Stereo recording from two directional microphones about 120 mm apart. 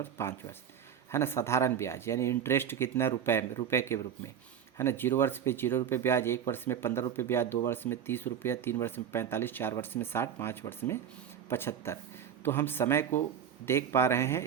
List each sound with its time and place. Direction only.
0.0 s speech: 20° left (ahead or behind)